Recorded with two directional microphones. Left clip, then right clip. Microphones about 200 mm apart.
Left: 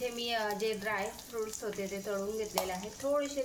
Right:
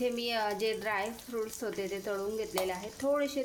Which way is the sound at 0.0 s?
45° right (ahead or behind).